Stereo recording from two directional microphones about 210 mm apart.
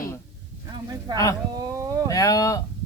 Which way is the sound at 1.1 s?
15° left (ahead or behind).